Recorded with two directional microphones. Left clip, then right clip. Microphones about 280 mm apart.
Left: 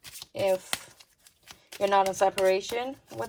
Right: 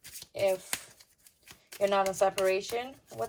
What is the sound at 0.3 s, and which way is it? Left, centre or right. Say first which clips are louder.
Speech: left 2 dB; left.